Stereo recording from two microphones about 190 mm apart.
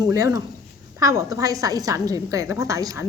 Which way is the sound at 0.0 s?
15° right (ahead or behind).